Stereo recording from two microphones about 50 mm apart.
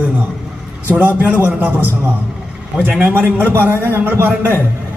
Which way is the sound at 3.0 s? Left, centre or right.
Right.